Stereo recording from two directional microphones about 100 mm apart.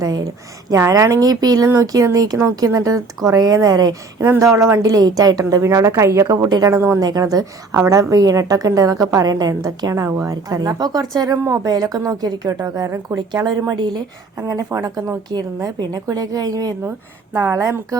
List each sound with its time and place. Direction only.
0.0 s a woman's voice: 35° right (ahead or behind)
6.7 s speech: 25° right (ahead or behind)
7.0 s a woman's voice: 40° right (ahead or behind)